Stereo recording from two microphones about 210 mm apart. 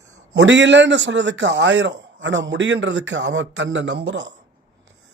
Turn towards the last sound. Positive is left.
turn(degrees=-55)  # may be behind; listen again after turning